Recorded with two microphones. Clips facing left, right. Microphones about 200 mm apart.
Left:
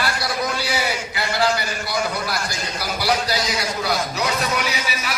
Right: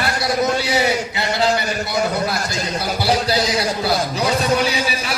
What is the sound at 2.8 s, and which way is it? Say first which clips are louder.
A man's voice: right 2 dB; 25° right (ahead or behind).